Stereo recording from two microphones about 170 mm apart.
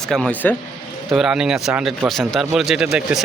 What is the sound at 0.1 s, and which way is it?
A man's voice, 5° left (ahead or behind).